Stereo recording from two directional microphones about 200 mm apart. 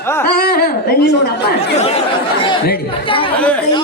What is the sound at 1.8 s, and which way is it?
Speech, 30° left (ahead or behind).